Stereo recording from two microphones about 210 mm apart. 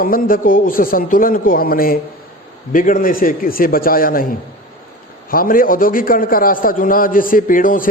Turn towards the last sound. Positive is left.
turn(degrees=40)  # may be behind; listen again after turning